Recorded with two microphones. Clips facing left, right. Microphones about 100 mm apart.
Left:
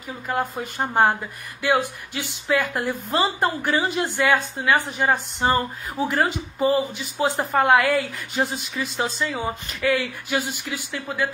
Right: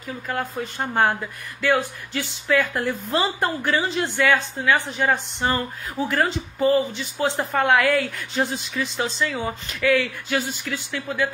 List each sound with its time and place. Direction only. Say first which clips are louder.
0.3 s speech: left 2 dB; 10° left (ahead or behind)
3.1 s speech: left 2 dB; centre (ahead or behind)